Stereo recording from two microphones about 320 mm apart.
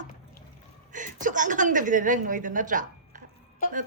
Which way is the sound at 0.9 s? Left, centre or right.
Right.